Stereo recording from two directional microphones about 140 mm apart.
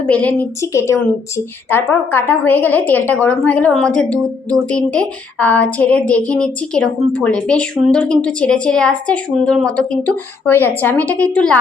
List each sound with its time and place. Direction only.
0.1 s a woman's voice: 10° left (ahead or behind)